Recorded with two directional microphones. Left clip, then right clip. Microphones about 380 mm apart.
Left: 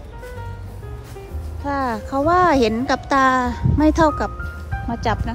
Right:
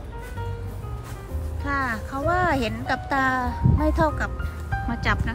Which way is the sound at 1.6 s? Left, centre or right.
Centre.